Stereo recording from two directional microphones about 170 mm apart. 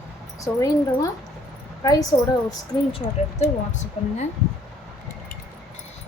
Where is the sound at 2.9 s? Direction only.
40° left (ahead or behind).